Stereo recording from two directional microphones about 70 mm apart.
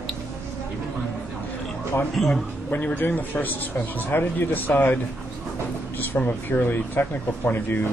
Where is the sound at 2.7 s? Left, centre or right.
Left.